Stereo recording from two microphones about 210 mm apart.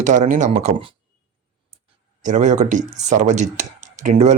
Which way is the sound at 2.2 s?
35° right (ahead or behind).